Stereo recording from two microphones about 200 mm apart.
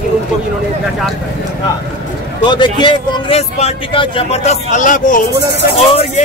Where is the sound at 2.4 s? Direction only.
20° left (ahead or behind).